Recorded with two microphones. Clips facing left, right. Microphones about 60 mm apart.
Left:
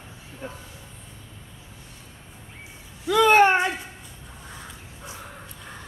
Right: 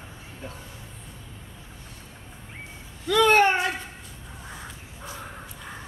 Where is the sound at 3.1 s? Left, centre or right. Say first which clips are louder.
Left 1 dB; centre.